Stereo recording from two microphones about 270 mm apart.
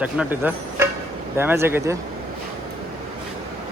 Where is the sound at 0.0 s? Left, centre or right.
Centre.